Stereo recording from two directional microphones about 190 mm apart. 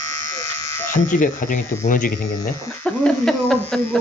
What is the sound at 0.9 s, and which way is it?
Speech, 45° left (ahead or behind).